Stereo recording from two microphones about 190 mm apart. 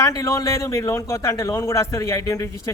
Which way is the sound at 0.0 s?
15° left (ahead or behind).